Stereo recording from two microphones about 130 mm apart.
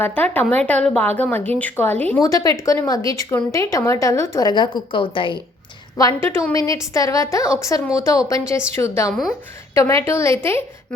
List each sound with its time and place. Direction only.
0.0 s a woman's voice: 15° left (ahead or behind)
2.2 s speech: 25° left (ahead or behind)
6.0 s speech: 20° left (ahead or behind)